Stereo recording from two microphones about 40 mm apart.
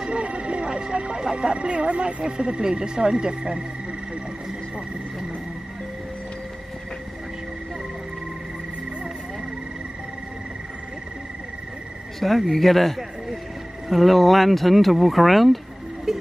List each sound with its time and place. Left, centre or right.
0.0 s speech: right
12.2 s speech: centre
16.1 s music: centre